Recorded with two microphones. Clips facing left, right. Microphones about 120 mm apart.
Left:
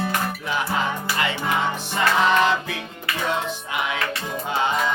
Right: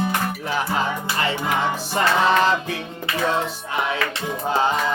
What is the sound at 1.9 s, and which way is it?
Music, 35° right (ahead or behind).